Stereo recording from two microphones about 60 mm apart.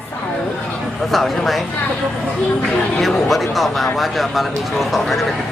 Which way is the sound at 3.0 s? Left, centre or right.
Centre.